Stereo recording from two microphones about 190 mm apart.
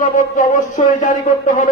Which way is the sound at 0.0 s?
45° left (ahead or behind).